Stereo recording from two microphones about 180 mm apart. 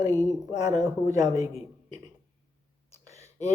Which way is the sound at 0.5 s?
20° right (ahead or behind).